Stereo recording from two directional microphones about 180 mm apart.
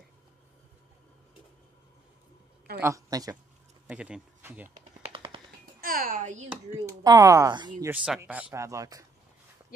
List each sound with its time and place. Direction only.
2.8 s speech: 20° right (ahead or behind)
3.8 s speech: 5° right (ahead or behind)
4.6 s computer keyboard: 35° right (ahead or behind)
5.8 s a sound: 55° right (ahead or behind)
6.5 s speech: 15° right (ahead or behind)
7.8 s a man's voice: 5° right (ahead or behind)